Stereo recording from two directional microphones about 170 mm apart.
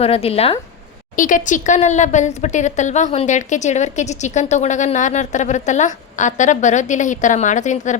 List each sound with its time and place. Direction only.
0.0 s speech: 35° left (ahead or behind)
1.1 s speech: 50° left (ahead or behind)